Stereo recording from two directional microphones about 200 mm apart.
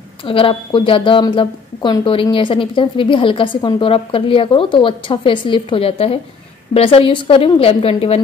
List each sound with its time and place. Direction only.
0.2 s a woman's voice: 25° left (ahead or behind)